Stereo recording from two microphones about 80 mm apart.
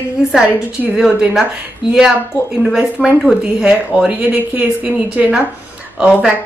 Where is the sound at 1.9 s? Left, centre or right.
Centre.